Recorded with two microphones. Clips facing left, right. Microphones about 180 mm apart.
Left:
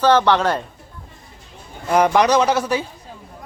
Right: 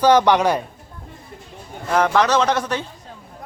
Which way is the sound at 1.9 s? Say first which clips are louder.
Left 2 dB; 15° left (ahead or behind).